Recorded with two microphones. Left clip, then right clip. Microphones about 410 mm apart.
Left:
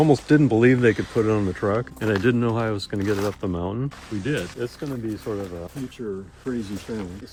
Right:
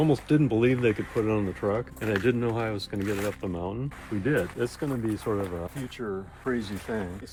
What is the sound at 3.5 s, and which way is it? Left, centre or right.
Speech, left.